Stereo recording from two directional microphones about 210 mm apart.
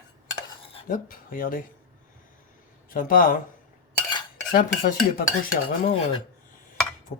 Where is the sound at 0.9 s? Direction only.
40° left (ahead or behind).